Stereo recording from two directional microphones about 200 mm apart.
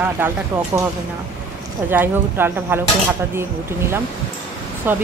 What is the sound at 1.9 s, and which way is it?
Speech, 10° right (ahead or behind).